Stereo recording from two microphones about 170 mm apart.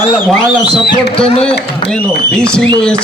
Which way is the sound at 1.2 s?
35° left (ahead or behind).